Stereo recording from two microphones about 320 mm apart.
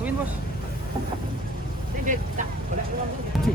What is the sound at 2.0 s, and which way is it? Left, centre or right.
Speech, right.